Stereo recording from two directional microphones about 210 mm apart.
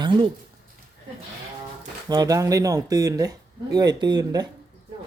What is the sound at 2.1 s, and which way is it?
Speech, 15° right (ahead or behind).